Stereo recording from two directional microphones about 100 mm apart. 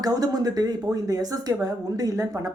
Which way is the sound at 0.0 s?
40° right (ahead or behind).